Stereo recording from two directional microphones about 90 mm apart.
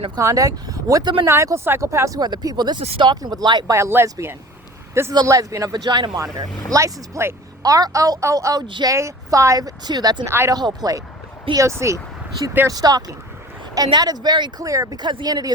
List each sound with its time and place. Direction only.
0.2 s a woman's voice: 35° right (ahead or behind)
3.7 s a woman's voice: 30° right (ahead or behind); by 6.1 s 55° right (ahead or behind)
6.7 s a woman's voice: 35° right (ahead or behind)
7.6 s a woman's voice: 40° right (ahead or behind)
8.6 s speech: 60° right (ahead or behind)
8.9 s speech: 35° right (ahead or behind)
10.2 s speech: 30° right (ahead or behind)
10.5 s a woman's voice: 45° right (ahead or behind)
14.6 s a woman's voice: 40° right (ahead or behind)